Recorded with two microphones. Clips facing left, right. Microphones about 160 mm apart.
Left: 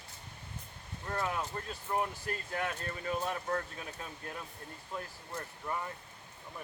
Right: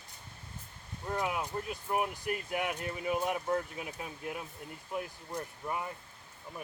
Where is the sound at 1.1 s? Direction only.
15° right (ahead or behind).